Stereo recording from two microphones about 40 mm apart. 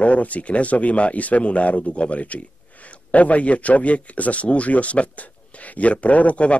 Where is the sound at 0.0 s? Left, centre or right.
Left.